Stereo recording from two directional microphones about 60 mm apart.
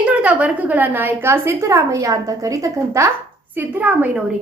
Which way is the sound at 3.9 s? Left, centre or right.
Right.